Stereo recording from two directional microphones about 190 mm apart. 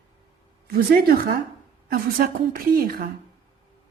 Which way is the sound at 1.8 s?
50° right (ahead or behind).